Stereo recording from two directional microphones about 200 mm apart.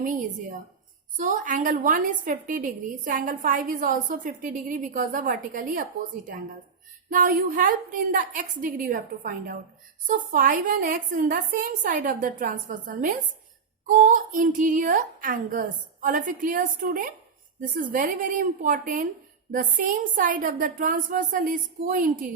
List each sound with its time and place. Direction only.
0.0 s a woman's voice: 40° right (ahead or behind)